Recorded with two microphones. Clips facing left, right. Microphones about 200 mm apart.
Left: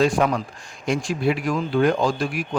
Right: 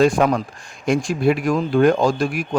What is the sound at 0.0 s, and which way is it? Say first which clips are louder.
A man's voice: right 4 dB; 50° right (ahead or behind).